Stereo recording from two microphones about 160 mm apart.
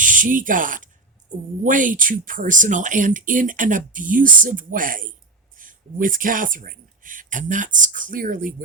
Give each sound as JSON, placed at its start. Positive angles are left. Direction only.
{"t": 0.0, "sound": "speech", "side_deg": -55}